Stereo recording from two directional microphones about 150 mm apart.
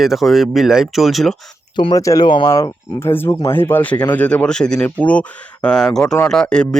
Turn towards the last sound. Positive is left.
turn(degrees=5)  # may be behind; listen again after turning